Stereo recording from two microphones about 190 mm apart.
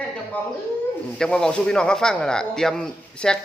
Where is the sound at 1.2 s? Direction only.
5° left (ahead or behind).